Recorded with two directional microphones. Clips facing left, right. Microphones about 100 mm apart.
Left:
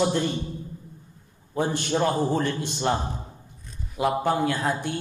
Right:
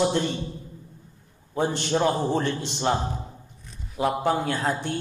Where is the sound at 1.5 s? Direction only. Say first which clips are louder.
Right 1 dB; 20° right (ahead or behind).